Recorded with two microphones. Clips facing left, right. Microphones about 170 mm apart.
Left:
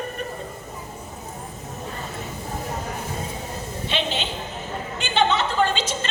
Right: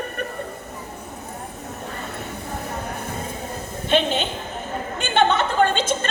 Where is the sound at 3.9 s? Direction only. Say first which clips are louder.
Right 7 dB; 50° right (ahead or behind).